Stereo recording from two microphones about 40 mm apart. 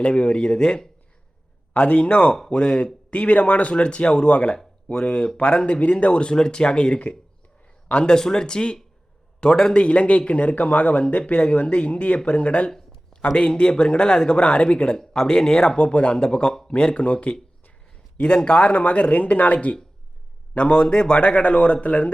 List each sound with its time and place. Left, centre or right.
0.0 s speech: left
1.7 s speech: left
2.5 s speech: left
3.1 s speech: left
8.1 s speech: centre
15.1 s speech: centre
15.8 s speech: left
17.9 s speech: left